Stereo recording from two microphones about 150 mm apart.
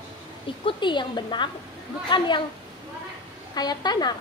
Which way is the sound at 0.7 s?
30° left (ahead or behind).